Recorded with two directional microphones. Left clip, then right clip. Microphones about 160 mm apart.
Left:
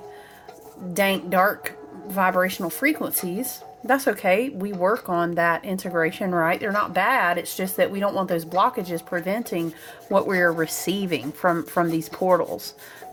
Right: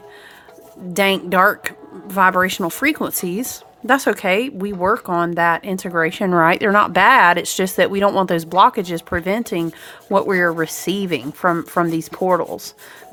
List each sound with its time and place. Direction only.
0.9 s a woman's voice: 35° right (ahead or behind)